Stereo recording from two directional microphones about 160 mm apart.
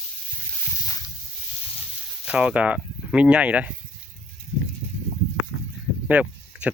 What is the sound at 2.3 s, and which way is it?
Speech, 10° right (ahead or behind).